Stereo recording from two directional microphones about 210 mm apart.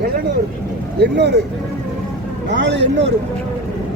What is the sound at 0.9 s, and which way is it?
Speech, 55° right (ahead or behind).